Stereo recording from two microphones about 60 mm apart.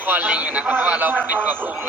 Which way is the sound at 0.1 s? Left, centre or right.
Right.